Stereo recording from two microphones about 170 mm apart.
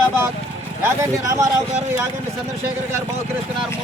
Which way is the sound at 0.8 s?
15° right (ahead or behind).